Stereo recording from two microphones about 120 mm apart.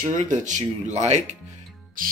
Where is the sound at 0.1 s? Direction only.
90° right; by 1.2 s 75° right (ahead or behind).